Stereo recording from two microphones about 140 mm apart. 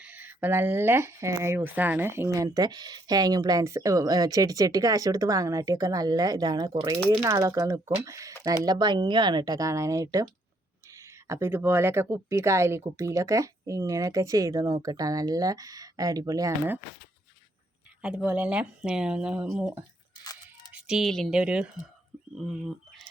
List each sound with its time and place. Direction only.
0.0 s speech: 10° right (ahead or behind)
18.0 s speech: 10° right (ahead or behind)